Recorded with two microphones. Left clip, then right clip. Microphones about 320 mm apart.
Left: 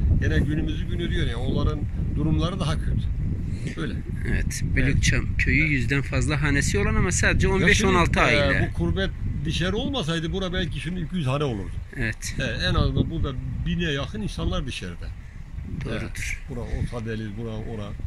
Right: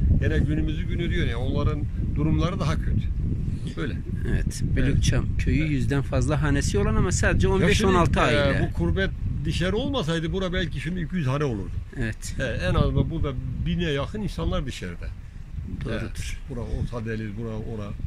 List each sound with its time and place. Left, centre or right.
0.2 s speech: centre